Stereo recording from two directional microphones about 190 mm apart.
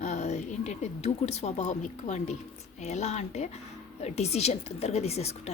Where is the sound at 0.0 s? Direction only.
35° left (ahead or behind).